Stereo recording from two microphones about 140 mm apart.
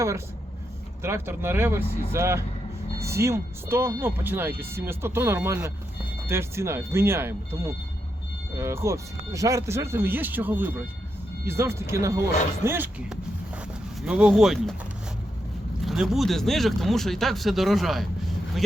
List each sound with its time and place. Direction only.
1.0 s speech: 15° right (ahead or behind)
15.8 s speech: centre (ahead or behind)